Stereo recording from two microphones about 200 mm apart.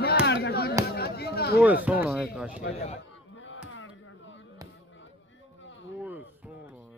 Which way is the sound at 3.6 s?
90° left.